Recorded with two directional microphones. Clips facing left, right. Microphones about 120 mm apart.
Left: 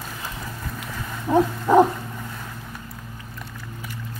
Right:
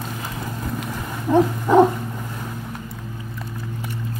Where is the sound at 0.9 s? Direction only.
15° right (ahead or behind).